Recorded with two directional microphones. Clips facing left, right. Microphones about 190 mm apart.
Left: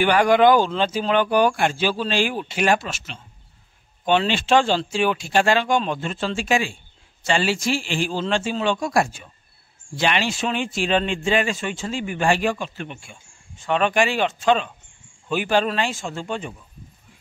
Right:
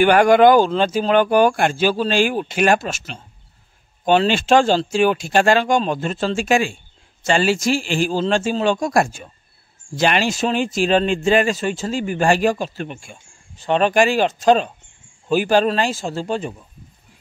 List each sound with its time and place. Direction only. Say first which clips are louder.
0.0 s speech: right 4 dB; 50° right (ahead or behind)